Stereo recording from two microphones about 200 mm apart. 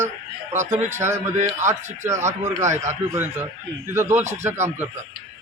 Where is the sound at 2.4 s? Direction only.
35° right (ahead or behind).